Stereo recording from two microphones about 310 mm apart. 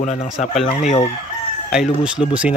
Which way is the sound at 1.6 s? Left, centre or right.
Centre.